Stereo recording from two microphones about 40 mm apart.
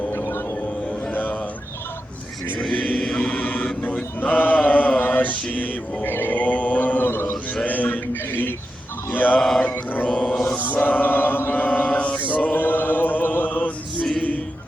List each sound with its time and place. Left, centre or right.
0.1 s vehicle: left
1.1 s a sound: left
2.6 s chant: left
3.0 s chant: centre
3.2 s chant: left
4.2 s mantra: left
6.3 s mantra: left
7.0 s chant: left
7.6 s male singing: left
9.1 s mantra: left
10.1 s mantra: left
10.6 s chant: left
11.6 s mantra: left
12.3 s chant: left